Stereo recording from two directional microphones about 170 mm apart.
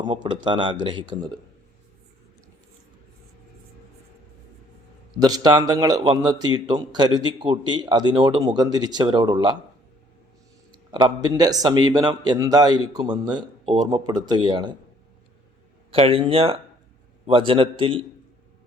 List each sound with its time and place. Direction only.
0.0 s a man's voice: 25° right (ahead or behind)
5.1 s a man's voice: 25° right (ahead or behind)
10.7 s a man's voice: 25° right (ahead or behind)
15.9 s a man's voice: 35° right (ahead or behind)